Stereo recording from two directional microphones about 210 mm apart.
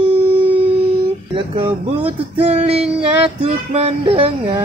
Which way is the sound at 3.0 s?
25° right (ahead or behind).